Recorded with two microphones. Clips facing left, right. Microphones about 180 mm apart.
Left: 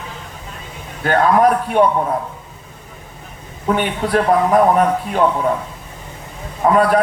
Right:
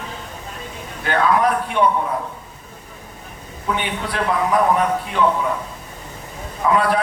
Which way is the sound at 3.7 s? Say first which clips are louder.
Left 7 dB; 45° left (ahead or behind).